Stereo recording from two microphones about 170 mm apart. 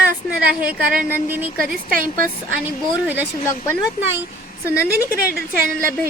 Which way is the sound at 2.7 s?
10° right (ahead or behind).